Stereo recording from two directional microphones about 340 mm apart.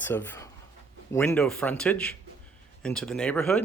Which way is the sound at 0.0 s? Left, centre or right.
Centre.